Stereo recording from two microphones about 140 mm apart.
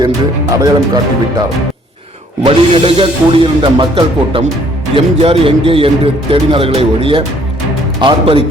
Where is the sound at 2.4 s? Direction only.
40° right (ahead or behind).